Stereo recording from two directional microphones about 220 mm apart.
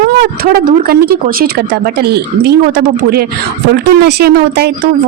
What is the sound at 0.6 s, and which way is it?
Speech, 40° right (ahead or behind).